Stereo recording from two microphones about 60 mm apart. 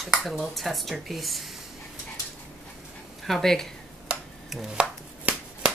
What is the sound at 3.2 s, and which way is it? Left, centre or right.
Speech, centre.